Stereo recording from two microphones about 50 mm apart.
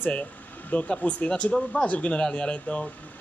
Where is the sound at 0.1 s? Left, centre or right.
Left.